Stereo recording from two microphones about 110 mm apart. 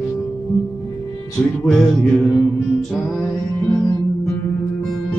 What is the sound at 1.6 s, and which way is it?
Music, 5° left (ahead or behind).